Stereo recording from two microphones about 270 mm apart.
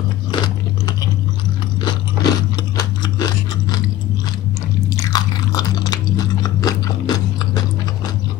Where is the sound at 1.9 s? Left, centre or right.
Centre.